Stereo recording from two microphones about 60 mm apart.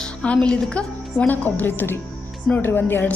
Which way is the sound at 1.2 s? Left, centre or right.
Left.